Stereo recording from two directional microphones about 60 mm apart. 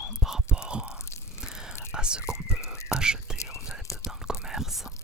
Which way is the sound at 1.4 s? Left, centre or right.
Centre.